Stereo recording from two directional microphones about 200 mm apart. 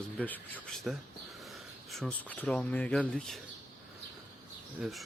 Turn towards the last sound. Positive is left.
turn(degrees=0)  # may be behind; listen again after turning